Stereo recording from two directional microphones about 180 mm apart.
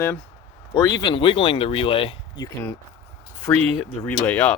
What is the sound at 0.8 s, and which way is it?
Speech, 25° left (ahead or behind).